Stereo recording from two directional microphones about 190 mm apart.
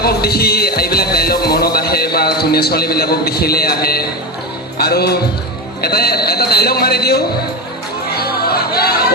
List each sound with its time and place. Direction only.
0.0 s music: 55° left (ahead or behind)
4.8 s a man's voice: 55° left (ahead or behind)
8.1 s music: 55° left (ahead or behind)